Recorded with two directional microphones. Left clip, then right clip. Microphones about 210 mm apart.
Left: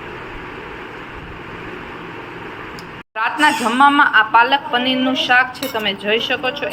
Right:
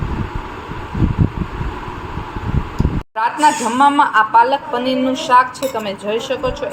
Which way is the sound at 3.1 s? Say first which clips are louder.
Right 1 dB; centre (ahead or behind).